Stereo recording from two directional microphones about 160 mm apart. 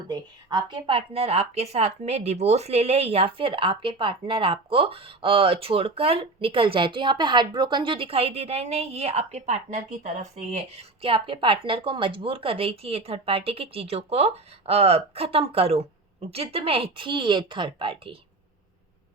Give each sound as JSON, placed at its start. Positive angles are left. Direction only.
{"t": 0.1, "sound": "a woman's voice", "side_deg": -25}